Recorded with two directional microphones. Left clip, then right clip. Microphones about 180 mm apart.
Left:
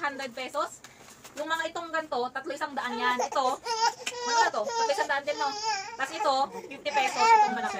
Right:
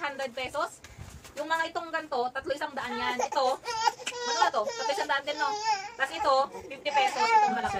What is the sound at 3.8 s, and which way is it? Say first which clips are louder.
Speech: left 1 dB; 35° left (ahead or behind).